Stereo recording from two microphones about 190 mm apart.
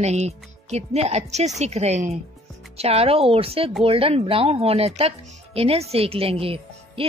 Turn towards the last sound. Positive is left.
turn(degrees=-30)  # may be behind; listen again after turning